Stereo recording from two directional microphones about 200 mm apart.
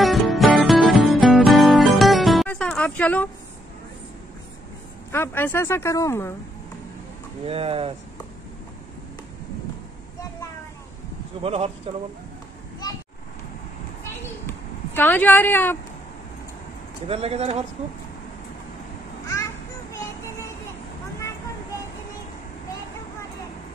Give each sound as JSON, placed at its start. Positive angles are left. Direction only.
{"t": 0.0, "sound": "music", "side_deg": 0}
{"t": 5.1, "sound": "speech", "side_deg": 10}
{"t": 7.4, "sound": "speech", "side_deg": -30}
{"t": 11.4, "sound": "speech", "side_deg": -30}
{"t": 15.0, "sound": "speech", "side_deg": 10}
{"t": 17.1, "sound": "speech", "side_deg": -30}
{"t": 19.2, "sound": "a sound", "side_deg": 15}